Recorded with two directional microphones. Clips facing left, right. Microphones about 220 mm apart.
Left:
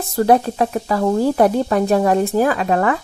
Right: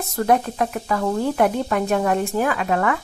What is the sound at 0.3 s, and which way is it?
Speech, 30° left (ahead or behind).